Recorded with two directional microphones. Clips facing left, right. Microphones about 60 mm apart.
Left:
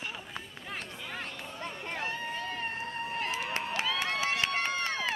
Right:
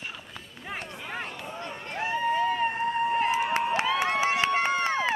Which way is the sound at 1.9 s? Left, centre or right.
Centre.